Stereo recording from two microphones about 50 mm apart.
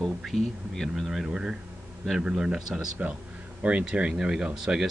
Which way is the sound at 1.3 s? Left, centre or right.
Centre.